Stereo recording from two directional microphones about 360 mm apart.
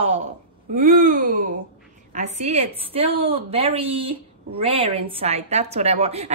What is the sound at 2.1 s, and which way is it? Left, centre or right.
A woman's voice, centre.